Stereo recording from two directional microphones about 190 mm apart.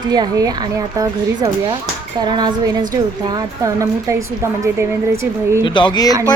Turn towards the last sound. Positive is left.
turn(degrees=20)  # may be behind; listen again after turning